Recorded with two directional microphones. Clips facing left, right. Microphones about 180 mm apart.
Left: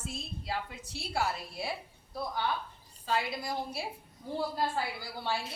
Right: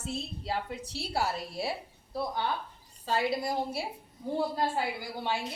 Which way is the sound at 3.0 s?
35° right (ahead or behind).